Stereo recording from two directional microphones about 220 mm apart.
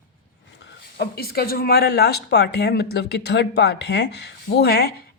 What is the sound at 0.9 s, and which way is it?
Speech, 45° left (ahead or behind).